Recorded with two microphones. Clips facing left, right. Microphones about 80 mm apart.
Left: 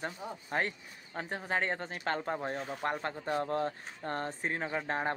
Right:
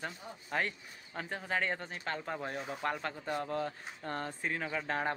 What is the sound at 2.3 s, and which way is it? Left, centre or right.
Speech, left.